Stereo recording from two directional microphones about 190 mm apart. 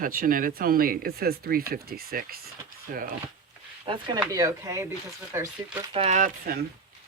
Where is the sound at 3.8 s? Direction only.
25° right (ahead or behind).